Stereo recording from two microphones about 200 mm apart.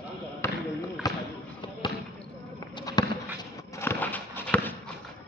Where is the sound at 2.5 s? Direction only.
20° left (ahead or behind).